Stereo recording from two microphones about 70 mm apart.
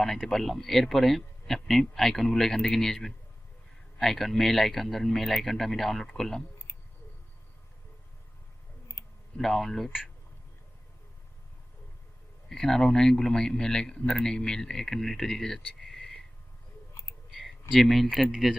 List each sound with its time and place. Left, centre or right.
0.0 s speech: centre
8.9 s clicking: left
9.4 s speech: centre
12.5 s speech: centre
16.9 s chewing: left
17.3 s a sound: centre
18.3 s speech: centre